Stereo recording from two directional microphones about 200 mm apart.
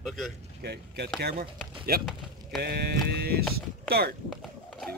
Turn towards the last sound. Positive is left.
turn(degrees=5)  # may be behind; listen again after turning